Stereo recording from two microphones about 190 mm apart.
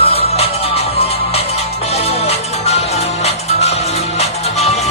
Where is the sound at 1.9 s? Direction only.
35° left (ahead or behind).